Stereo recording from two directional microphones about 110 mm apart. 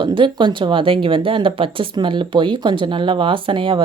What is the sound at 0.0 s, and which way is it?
A woman's voice, 45° right (ahead or behind).